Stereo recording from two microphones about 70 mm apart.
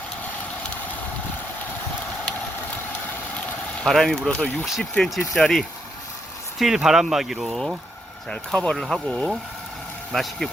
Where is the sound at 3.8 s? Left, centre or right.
Centre.